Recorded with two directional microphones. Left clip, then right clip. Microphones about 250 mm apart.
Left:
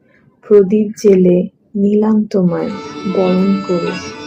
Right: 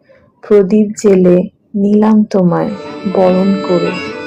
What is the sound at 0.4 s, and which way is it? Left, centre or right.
Speech, centre.